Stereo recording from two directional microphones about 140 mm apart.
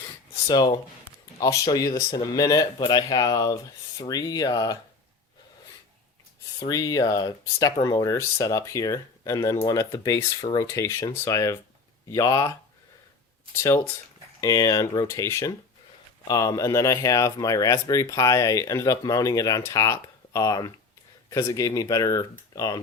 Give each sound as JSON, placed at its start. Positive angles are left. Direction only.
{"t": 0.0, "sound": "a sound", "side_deg": 30}
{"t": 1.4, "sound": "speech", "side_deg": 25}
{"t": 6.6, "sound": "speech", "side_deg": 25}
{"t": 13.6, "sound": "speech", "side_deg": 20}